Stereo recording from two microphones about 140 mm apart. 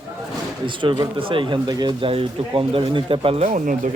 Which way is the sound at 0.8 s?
35° right (ahead or behind).